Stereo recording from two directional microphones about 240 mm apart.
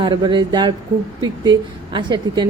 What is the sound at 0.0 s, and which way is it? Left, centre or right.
A woman's voice, centre.